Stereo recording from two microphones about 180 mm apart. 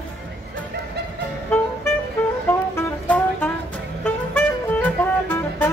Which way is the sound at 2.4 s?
10° left (ahead or behind).